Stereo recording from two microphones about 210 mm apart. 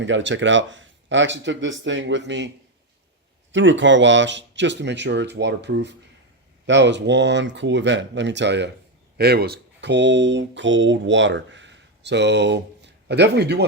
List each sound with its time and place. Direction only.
0.0 s speech: 60° right (ahead or behind)
3.5 s speech: 60° right (ahead or behind)